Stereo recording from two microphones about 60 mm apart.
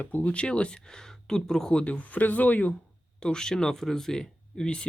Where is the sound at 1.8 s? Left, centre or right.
Left.